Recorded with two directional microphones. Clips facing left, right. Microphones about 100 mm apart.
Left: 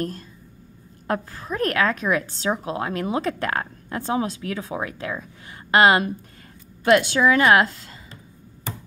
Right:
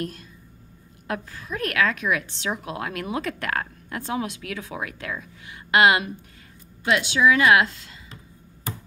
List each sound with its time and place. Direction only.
1.0 s a woman's voice: 40° left (ahead or behind)
6.8 s a woman's voice: 50° left (ahead or behind)